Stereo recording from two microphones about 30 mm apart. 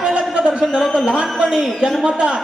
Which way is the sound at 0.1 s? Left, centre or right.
Right.